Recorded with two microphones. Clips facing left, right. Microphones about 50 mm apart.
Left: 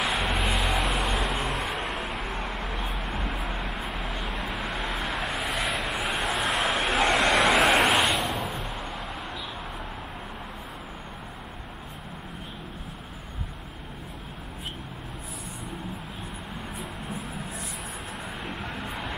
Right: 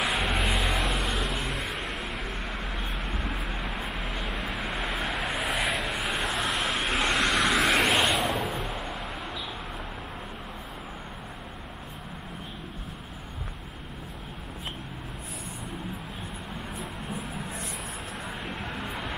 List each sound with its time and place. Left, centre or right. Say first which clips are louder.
0.0 s vehicle: left 1 dB; centre
2.3 s vehicle: left 3 dB; left
2.8 s vehicle: left 2 dB; centre
6.8 s vehicle: left 3 dB; left
7.1 s vehicle: left 3 dB; left
7.6 s vehicle: left 2 dB; centre
16.7 s a sound: even; centre
18.4 s vehicle: left 1 dB; centre